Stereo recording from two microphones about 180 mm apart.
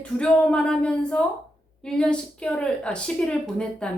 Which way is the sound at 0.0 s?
5° left (ahead or behind).